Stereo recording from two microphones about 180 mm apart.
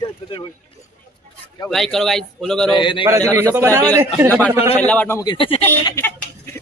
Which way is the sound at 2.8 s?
25° left (ahead or behind).